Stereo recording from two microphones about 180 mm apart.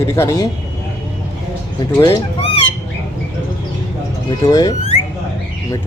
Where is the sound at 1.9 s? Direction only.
15° left (ahead or behind).